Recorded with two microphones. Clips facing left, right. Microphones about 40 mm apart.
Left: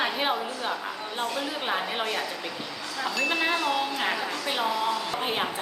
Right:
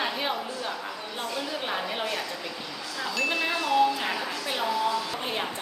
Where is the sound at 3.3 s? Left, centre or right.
Left.